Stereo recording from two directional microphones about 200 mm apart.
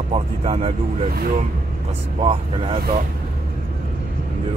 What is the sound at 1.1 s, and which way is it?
Speech, 50° right (ahead or behind).